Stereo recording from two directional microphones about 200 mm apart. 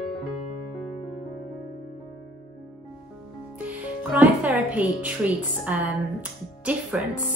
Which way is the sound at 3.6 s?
5° right (ahead or behind).